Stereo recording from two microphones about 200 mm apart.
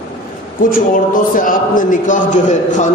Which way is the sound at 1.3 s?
40° left (ahead or behind).